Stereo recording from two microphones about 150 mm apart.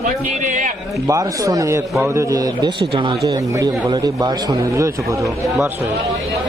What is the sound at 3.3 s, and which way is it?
Speech, 20° right (ahead or behind).